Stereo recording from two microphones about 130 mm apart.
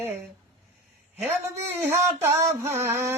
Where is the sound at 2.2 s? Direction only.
20° right (ahead or behind).